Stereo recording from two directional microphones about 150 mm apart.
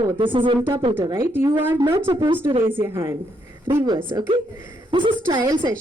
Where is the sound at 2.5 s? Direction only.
35° right (ahead or behind).